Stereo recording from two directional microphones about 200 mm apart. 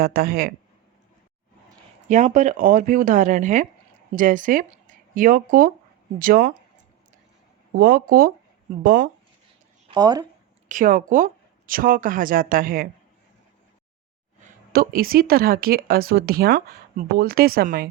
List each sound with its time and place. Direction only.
0.0 s speech: 50° right (ahead or behind)
2.0 s speech: 35° right (ahead or behind)
7.8 s speech: 45° right (ahead or behind)
9.9 s speech: 20° right (ahead or behind)
10.7 s speech: 40° right (ahead or behind)
14.7 s speech: 45° right (ahead or behind)